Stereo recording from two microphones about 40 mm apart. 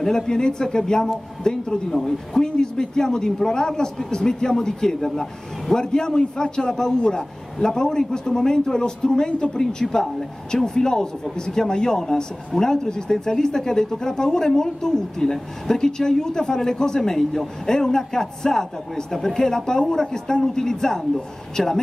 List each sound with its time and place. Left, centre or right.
0.0 s a man's voice: centre
21.6 s speech: centre